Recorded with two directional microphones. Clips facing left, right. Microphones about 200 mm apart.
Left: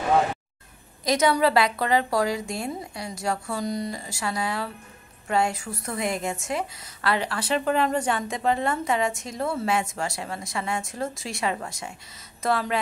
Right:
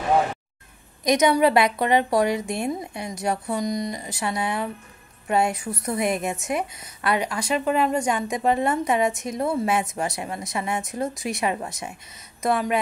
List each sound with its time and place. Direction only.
1.0 s a woman's voice: 20° right (ahead or behind)